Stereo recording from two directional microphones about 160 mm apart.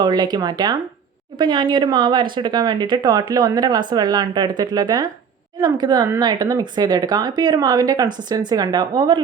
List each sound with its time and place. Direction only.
0.0 s speech: 25° right (ahead or behind)